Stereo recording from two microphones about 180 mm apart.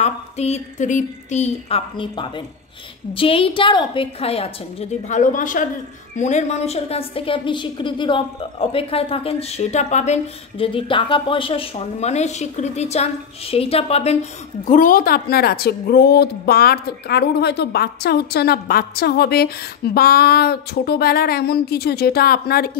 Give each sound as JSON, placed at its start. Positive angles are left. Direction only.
{"t": 0.0, "sound": "a woman's voice", "side_deg": 35}
{"t": 2.0, "sound": "a woman's voice", "side_deg": 25}
{"t": 14.6, "sound": "a woman's voice", "side_deg": 45}